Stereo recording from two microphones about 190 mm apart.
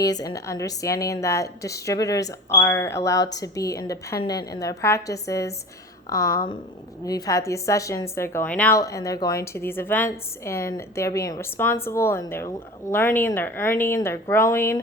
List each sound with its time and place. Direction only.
0.0 s a woman's voice: 20° left (ahead or behind)